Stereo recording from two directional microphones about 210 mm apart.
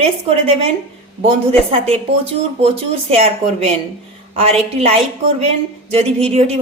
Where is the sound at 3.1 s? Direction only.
30° right (ahead or behind).